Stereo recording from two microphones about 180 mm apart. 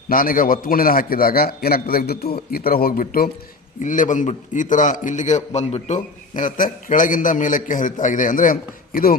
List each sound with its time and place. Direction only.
0.1 s a man's voice: 50° left (ahead or behind)